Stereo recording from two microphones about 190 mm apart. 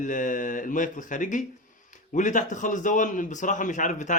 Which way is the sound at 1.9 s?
40° left (ahead or behind).